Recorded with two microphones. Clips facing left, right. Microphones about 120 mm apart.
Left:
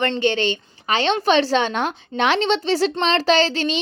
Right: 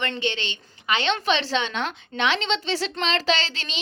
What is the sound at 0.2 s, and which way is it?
A woman's voice, 45° left (ahead or behind).